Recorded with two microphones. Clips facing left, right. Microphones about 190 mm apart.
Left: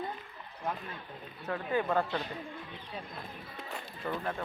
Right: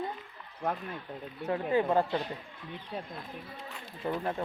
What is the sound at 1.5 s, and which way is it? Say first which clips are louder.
Speech: right 4 dB; 25° right (ahead or behind).